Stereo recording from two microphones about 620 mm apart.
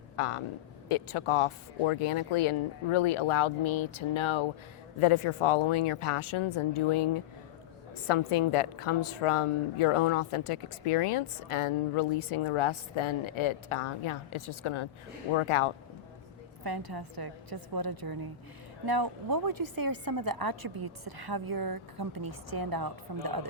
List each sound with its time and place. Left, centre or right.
0.2 s a woman's voice: left
16.6 s a woman's voice: right